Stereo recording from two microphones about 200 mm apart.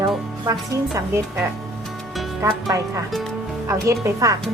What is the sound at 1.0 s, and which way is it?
A child's voice, 15° right (ahead or behind).